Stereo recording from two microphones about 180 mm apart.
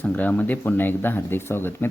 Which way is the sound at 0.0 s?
10° left (ahead or behind).